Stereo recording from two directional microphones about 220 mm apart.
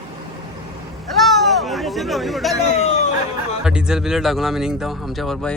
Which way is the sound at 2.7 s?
30° left (ahead or behind).